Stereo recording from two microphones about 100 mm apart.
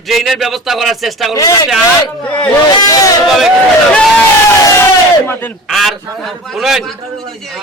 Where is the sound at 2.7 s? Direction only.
40° left (ahead or behind).